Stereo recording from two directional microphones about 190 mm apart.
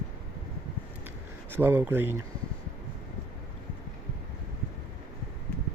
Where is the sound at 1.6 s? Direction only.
10° right (ahead or behind).